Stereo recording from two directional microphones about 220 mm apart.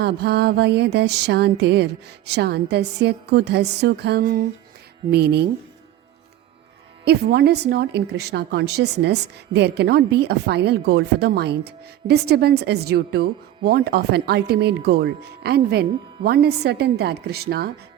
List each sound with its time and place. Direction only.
0.0 s a woman's voice: 45° right (ahead or behind)
7.0 s a woman's voice: 45° right (ahead or behind)